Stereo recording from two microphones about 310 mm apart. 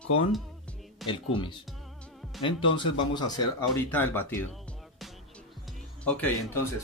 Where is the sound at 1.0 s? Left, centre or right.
Centre.